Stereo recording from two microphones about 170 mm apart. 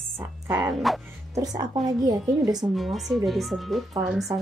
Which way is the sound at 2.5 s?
Centre (ahead or behind).